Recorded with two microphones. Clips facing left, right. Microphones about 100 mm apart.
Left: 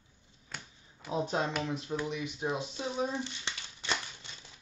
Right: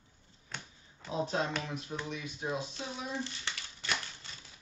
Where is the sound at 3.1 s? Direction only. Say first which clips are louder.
Left 1 dB; 20° left (ahead or behind).